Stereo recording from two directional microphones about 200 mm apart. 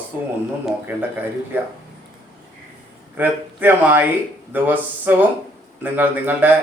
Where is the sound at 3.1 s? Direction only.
10° right (ahead or behind).